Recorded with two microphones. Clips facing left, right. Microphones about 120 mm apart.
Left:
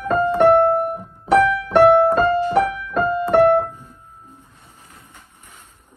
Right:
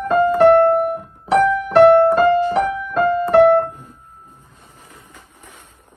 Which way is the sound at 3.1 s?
Centre (ahead or behind).